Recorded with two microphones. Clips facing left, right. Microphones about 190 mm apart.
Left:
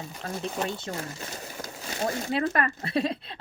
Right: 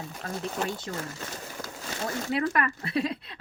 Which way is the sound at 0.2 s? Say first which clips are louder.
Left 1 dB; 35° left (ahead or behind).